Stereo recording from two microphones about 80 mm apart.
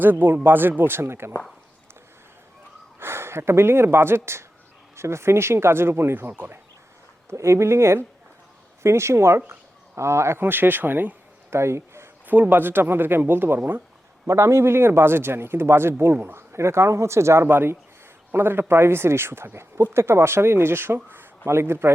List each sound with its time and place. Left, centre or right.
0.0 s speech: right
3.0 s speech: right
12.3 s speech: right